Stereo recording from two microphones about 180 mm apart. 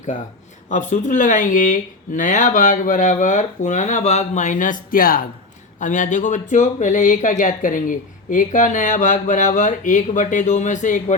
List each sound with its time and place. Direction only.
0.7 s speech: 45° left (ahead or behind)